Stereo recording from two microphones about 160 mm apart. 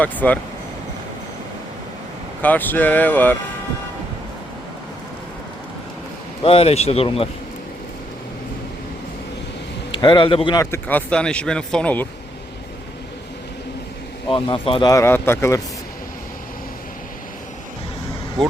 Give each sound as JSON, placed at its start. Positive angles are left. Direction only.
{"t": 0.0, "sound": "speech", "side_deg": 10}
{"t": 2.4, "sound": "speech", "side_deg": 10}
{"t": 6.4, "sound": "speech", "side_deg": 40}
{"t": 9.9, "sound": "speech", "side_deg": 30}
{"t": 14.3, "sound": "speech", "side_deg": 30}
{"t": 14.8, "sound": "speech", "side_deg": 15}